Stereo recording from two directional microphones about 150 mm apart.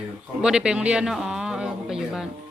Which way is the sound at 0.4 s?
5° right (ahead or behind).